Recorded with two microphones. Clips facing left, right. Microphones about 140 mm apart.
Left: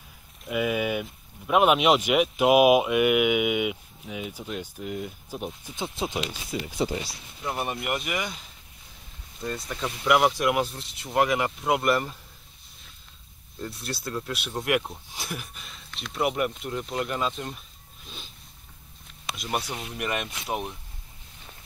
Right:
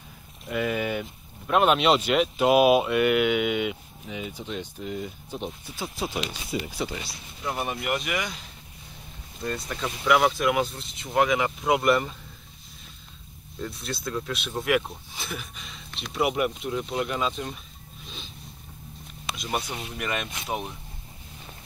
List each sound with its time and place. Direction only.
0.5 s speech: 10° left (ahead or behind)
5.8 s speech: 20° left (ahead or behind)
6.5 s speech: 5° right (ahead or behind)
9.4 s speech: 5° left (ahead or behind)
13.6 s speech: 10° left (ahead or behind)
16.2 s speech: 5° right (ahead or behind)
19.3 s speech: 5° left (ahead or behind)